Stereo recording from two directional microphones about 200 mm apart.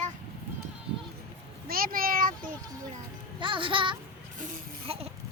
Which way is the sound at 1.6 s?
45° right (ahead or behind).